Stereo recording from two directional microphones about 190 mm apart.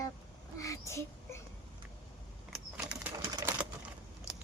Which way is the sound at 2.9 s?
10° right (ahead or behind).